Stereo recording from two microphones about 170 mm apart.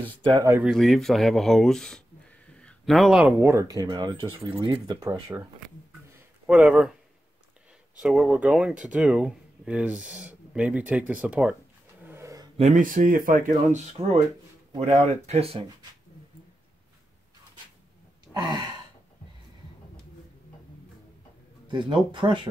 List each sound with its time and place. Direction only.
0.2 s speech: 30° right (ahead or behind)
0.5 s speech: 5° right (ahead or behind); by 5.4 s 25° right (ahead or behind)
6.4 s speech: 5° right (ahead or behind)
8.0 s speech: 5° right (ahead or behind)
12.0 s a sound: 15° right (ahead or behind)
12.5 s speech: 45° right (ahead or behind)
18.3 s gasp: 25° right (ahead or behind)
21.6 s speech: 25° right (ahead or behind)